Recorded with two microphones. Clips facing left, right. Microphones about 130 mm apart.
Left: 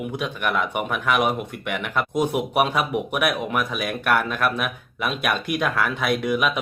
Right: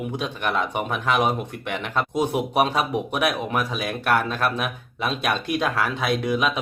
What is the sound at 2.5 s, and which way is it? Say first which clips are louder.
Speech: even; 30° right (ahead or behind).